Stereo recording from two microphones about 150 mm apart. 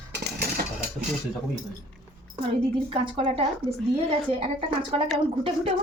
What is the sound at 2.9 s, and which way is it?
A woman's voice, 40° right (ahead or behind).